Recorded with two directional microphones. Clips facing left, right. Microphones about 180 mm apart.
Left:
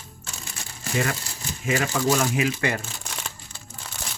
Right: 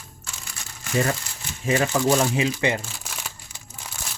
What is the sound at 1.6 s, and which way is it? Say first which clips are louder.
Speech: right 2 dB; 35° right (ahead or behind).